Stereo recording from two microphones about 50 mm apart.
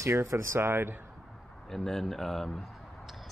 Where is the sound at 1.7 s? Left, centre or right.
Centre.